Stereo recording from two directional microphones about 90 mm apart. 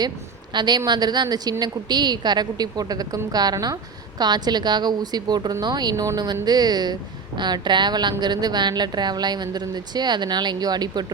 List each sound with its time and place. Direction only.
0.5 s a woman's voice: 50° right (ahead or behind)